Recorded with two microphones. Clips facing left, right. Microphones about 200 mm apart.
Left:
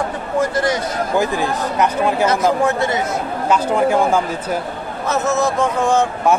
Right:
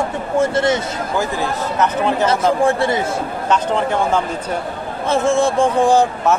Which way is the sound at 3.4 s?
10° left (ahead or behind).